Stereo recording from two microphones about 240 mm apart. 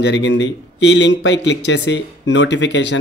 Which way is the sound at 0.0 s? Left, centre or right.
Left.